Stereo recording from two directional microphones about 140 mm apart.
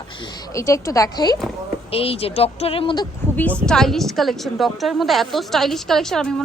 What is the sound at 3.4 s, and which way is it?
A woman's voice, 10° left (ahead or behind).